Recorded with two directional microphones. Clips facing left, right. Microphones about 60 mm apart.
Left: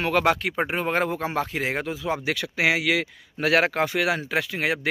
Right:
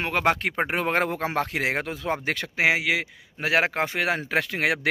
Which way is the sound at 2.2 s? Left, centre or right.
Right.